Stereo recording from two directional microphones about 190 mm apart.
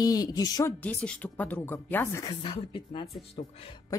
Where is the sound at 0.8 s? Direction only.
5° left (ahead or behind).